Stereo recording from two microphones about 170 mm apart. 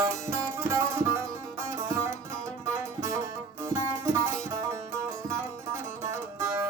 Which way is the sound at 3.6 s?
15° right (ahead or behind).